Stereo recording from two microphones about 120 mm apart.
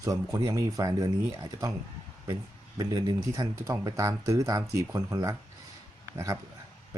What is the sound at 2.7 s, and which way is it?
Speech, 35° right (ahead or behind).